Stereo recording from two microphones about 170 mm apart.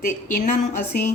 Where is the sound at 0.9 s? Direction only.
60° left (ahead or behind).